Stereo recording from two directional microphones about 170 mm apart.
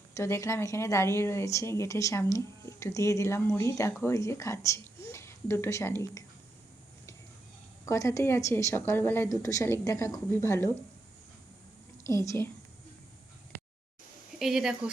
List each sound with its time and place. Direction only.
0.1 s speech: 15° left (ahead or behind)
7.9 s speech: 20° left (ahead or behind)
12.0 s speech: 15° left (ahead or behind)
14.3 s speech: centre (ahead or behind)